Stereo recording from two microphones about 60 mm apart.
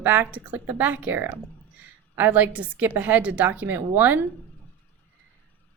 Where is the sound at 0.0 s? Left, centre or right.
Right.